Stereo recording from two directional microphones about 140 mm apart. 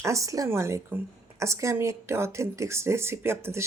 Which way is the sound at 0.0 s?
20° right (ahead or behind).